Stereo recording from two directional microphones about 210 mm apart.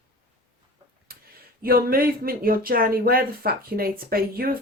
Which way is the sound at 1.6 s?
45° right (ahead or behind).